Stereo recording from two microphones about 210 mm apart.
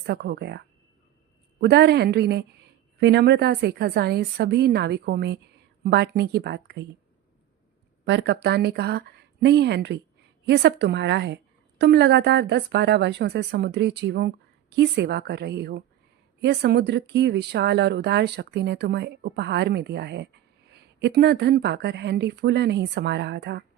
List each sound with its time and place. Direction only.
0.0 s speech: 50° right (ahead or behind)
1.6 s speech: 55° right (ahead or behind)
8.0 s a woman's voice: 55° right (ahead or behind)